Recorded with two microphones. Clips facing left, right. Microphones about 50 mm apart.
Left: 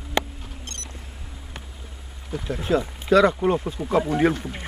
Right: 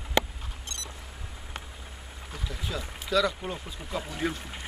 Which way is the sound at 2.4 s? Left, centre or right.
Left.